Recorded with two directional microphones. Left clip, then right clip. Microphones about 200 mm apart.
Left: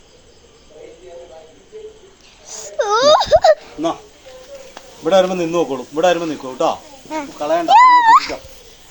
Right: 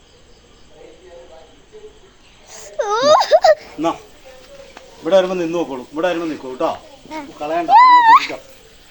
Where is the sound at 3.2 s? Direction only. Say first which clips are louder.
Even; 5° right (ahead or behind).